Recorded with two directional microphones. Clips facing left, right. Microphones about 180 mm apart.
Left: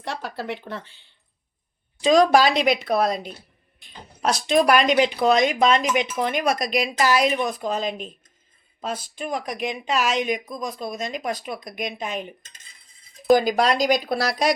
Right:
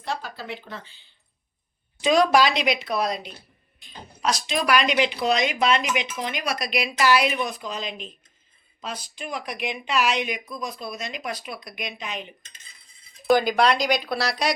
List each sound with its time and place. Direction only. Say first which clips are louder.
0.0 s speech: left 2 dB; 70° left (ahead or behind)
2.0 s speech: left 3 dB; 40° left (ahead or behind)
13.3 s speech: left 1 dB; 40° left (ahead or behind)